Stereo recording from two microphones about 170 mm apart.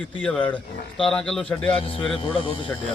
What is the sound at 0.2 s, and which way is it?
A man's voice, 10° left (ahead or behind).